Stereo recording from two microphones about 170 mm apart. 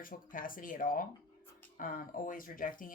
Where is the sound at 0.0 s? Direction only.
55° left (ahead or behind).